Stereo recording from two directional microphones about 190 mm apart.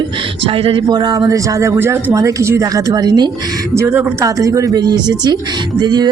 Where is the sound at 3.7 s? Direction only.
10° right (ahead or behind).